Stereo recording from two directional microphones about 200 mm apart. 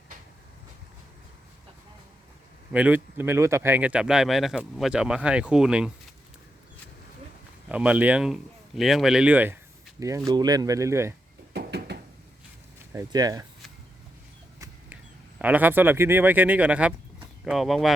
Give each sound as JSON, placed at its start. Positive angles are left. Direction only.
{"t": 2.7, "sound": "speech", "side_deg": -10}
{"t": 7.7, "sound": "speech", "side_deg": -5}
{"t": 10.2, "sound": "speech", "side_deg": -20}
{"t": 11.5, "sound": "a sound", "side_deg": -55}
{"t": 12.9, "sound": "speech", "side_deg": -15}
{"t": 15.4, "sound": "speech", "side_deg": -10}